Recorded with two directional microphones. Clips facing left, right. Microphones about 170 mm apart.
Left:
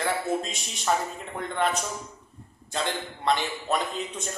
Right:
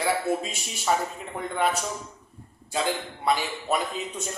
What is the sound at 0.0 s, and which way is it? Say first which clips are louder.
A man's voice: right 2 dB; 5° right (ahead or behind).